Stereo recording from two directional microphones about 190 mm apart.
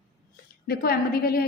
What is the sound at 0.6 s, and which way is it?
Speech, 55° left (ahead or behind).